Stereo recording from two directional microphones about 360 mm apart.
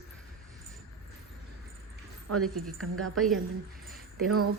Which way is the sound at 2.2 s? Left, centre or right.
Right.